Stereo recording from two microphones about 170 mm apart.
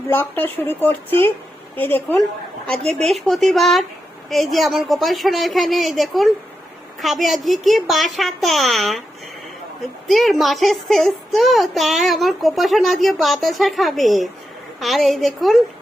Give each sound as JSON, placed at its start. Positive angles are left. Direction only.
{"t": 0.1, "sound": "a child's voice", "side_deg": 10}
{"t": 10.1, "sound": "a child's voice", "side_deg": 0}